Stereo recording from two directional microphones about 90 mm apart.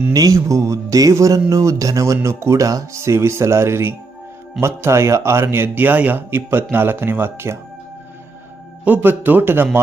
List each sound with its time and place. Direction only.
0.1 s speech: 40° right (ahead or behind)
8.8 s speech: 20° right (ahead or behind)